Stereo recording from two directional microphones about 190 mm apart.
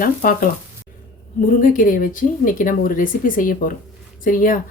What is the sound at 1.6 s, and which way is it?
Speech, 45° left (ahead or behind).